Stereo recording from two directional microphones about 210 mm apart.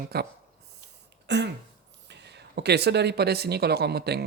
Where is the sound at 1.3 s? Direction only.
55° right (ahead or behind).